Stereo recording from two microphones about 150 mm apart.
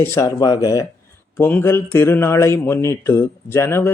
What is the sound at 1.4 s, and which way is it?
Speech, 15° left (ahead or behind).